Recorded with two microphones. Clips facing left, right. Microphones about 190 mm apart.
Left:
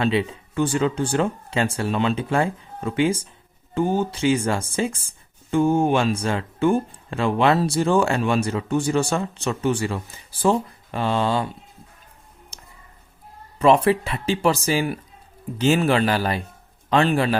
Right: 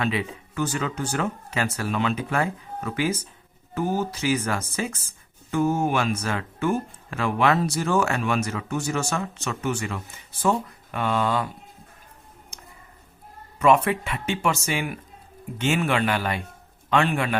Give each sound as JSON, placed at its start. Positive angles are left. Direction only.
{"t": 0.0, "sound": "speech", "side_deg": 30}
{"t": 12.5, "sound": "music", "side_deg": 35}
{"t": 13.6, "sound": "speech", "side_deg": 30}